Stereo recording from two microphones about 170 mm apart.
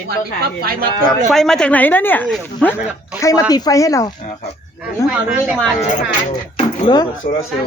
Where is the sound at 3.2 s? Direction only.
20° left (ahead or behind).